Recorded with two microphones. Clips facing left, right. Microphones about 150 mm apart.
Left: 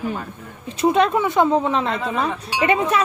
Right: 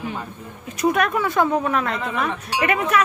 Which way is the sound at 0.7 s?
25° left (ahead or behind).